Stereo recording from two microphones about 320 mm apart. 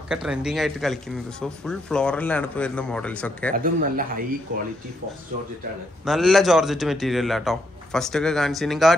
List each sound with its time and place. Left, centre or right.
0.1 s speech: centre
3.5 s speech: right
6.0 s speech: centre